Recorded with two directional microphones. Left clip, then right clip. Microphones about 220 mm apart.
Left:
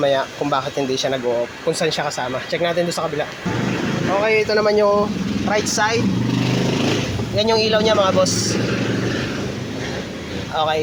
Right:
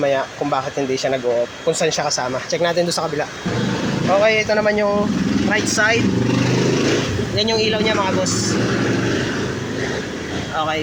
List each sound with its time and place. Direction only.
0.0 s speech: 15° left (ahead or behind)
2.0 s speech: centre (ahead or behind)
4.2 s speech: 10° left (ahead or behind)
7.3 s speech: 20° left (ahead or behind)